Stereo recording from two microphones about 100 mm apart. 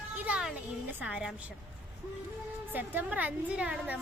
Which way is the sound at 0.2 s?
10° right (ahead or behind).